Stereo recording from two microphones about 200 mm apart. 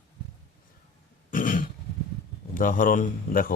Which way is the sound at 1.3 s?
40° left (ahead or behind).